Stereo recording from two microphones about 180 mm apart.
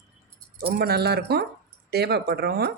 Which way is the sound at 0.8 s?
65° right (ahead or behind).